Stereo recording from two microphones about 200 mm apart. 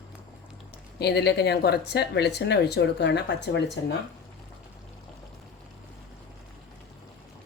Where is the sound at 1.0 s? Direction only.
55° left (ahead or behind).